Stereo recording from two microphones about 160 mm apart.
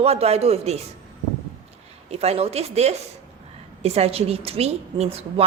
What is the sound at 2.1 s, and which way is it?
A woman's voice, 40° right (ahead or behind).